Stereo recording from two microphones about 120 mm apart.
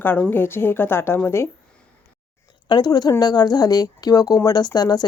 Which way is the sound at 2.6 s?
35° left (ahead or behind).